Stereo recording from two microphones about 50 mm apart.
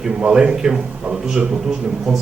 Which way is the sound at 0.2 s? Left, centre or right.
Right.